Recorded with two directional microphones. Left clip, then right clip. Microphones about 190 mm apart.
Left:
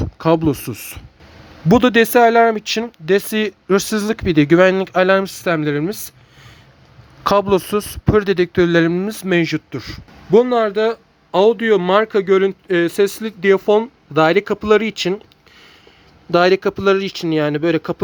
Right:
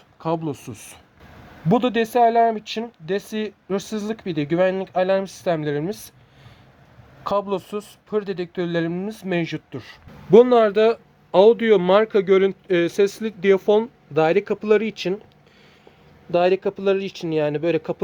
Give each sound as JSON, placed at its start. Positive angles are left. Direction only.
{"t": 0.2, "sound": "speech", "side_deg": 35}
{"t": 7.3, "sound": "speech", "side_deg": 30}
{"t": 10.3, "sound": "speech", "side_deg": 0}
{"t": 16.3, "sound": "speech", "side_deg": 20}